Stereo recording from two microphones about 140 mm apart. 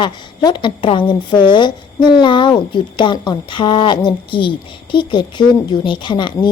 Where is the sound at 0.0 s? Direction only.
35° left (ahead or behind).